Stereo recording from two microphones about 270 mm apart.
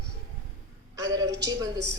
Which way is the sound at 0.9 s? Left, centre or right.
Centre.